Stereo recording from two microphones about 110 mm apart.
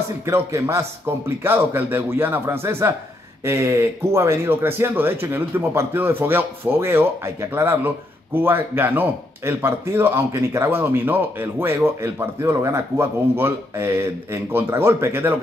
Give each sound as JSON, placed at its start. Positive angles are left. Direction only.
{"t": 0.2, "sound": "speech", "side_deg": -25}